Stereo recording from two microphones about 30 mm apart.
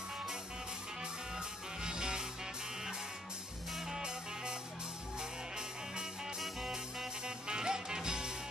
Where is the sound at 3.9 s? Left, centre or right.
Right.